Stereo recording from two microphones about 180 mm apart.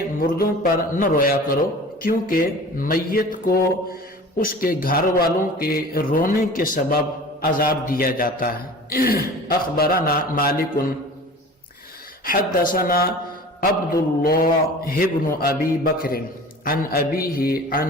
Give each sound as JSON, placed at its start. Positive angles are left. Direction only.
{"t": 0.2, "sound": "a man's voice", "side_deg": 50}
{"t": 12.2, "sound": "a man's voice", "side_deg": 55}